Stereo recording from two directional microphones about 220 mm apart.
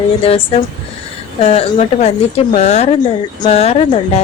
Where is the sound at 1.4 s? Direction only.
30° left (ahead or behind).